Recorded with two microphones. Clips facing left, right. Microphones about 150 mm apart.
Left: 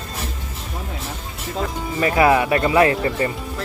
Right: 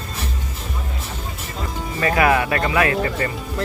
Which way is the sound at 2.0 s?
20° left (ahead or behind).